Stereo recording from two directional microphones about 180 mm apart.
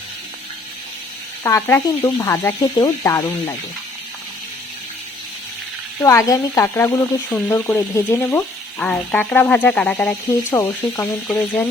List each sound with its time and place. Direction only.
1.5 s speech: 15° left (ahead or behind)
6.0 s speech: 15° left (ahead or behind)